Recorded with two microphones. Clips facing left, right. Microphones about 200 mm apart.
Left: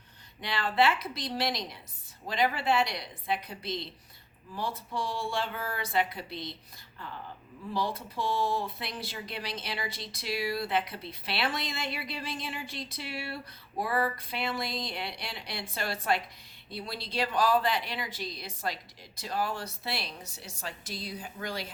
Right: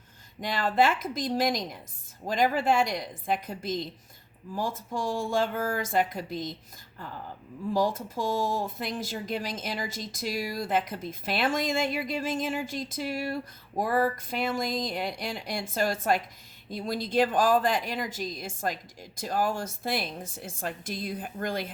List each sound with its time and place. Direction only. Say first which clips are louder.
0.4 s speech: right 2 dB; 45° right (ahead or behind)
7.7 s speech: right 6 dB; 45° right (ahead or behind)